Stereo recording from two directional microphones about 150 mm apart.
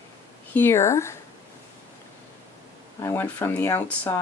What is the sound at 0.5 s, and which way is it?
Speech, 15° left (ahead or behind).